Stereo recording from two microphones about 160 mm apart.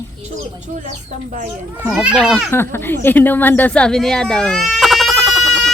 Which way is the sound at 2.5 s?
15° left (ahead or behind).